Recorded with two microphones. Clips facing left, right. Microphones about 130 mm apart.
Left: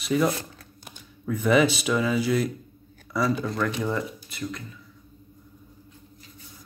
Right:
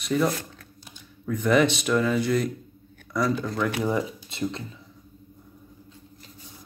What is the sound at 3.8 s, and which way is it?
Speech, 15° right (ahead or behind).